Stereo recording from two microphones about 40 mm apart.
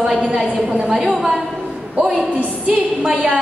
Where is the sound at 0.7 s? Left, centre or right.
Right.